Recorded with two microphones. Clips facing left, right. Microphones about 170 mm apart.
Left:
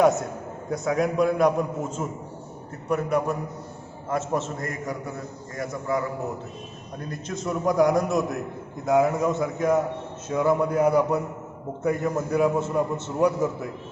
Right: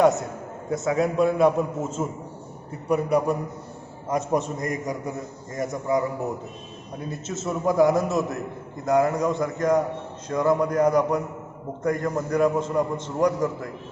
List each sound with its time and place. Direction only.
0.0 s a man's voice: centre (ahead or behind)
2.9 s a man's voice: 10° right (ahead or behind)
7.0 s a man's voice: 5° right (ahead or behind)